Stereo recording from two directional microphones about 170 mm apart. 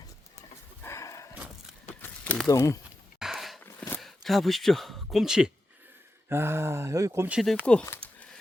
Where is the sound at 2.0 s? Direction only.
10° left (ahead or behind).